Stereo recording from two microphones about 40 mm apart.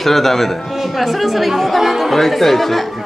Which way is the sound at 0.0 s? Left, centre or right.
Centre.